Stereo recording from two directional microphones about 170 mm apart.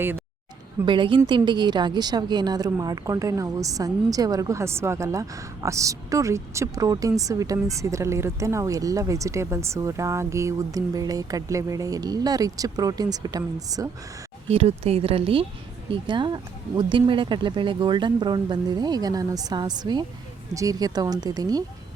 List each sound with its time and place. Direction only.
0.9 s a woman's voice: 30° right (ahead or behind)
14.5 s a woman's voice: 35° right (ahead or behind)